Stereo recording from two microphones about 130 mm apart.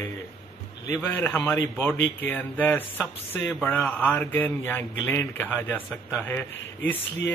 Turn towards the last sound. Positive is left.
turn(degrees=15)  # may be behind; listen again after turning